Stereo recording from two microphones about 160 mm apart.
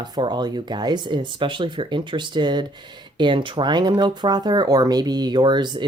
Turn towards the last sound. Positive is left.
turn(degrees=-25)  # may be behind; listen again after turning